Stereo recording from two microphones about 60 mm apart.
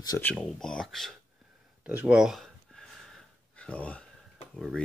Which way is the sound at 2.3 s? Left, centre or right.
Centre.